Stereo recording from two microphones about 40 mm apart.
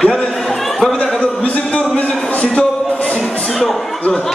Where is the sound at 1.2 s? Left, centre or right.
Left.